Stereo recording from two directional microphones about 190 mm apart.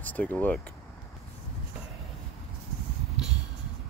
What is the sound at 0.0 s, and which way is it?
Speech, 10° left (ahead or behind).